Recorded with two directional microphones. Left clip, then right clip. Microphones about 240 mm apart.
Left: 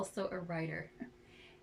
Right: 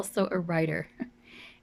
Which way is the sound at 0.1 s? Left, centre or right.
Right.